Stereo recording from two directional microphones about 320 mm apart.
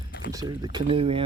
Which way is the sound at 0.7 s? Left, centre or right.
Centre.